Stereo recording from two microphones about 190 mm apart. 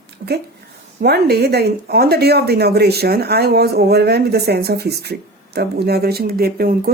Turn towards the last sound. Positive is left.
turn(degrees=-55)  # may be behind; listen again after turning